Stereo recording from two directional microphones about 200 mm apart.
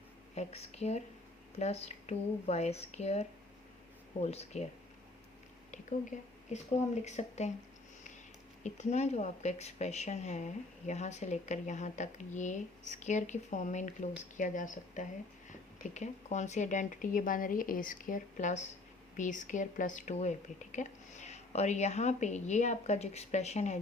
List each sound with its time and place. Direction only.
0.3 s speech: 35° left (ahead or behind)
5.7 s a sound: 35° left (ahead or behind)
7.0 s speech: 35° left (ahead or behind)
8.6 s speech: 35° left (ahead or behind)